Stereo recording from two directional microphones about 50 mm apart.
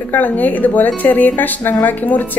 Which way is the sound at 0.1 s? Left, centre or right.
Left.